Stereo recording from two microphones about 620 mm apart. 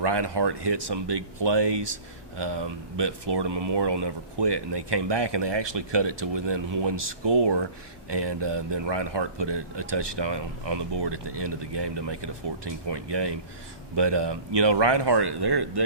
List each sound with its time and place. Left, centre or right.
0.0 s speech: right